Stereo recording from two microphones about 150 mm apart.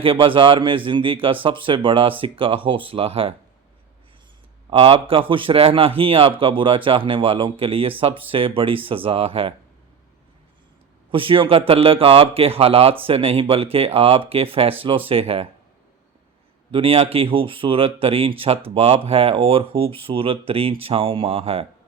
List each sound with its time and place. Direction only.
0.0 s speech: 35° right (ahead or behind)
4.7 s speech: 40° right (ahead or behind)
11.1 s speech: 35° right (ahead or behind)
16.7 s speech: 40° right (ahead or behind)